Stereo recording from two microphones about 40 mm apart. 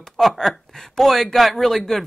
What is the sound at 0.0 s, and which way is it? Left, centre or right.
Speech, centre.